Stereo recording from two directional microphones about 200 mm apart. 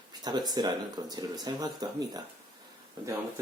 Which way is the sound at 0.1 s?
20° right (ahead or behind).